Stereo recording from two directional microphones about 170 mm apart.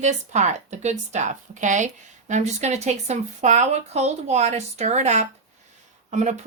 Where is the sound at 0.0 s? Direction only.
45° right (ahead or behind).